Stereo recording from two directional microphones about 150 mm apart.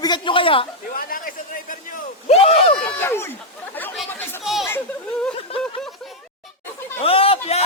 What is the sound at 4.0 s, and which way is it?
Chatter, centre (ahead or behind).